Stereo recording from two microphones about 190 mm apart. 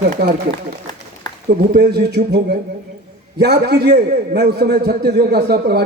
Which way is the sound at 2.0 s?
60° right (ahead or behind).